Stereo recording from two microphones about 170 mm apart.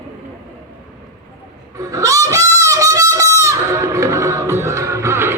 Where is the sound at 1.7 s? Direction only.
20° right (ahead or behind).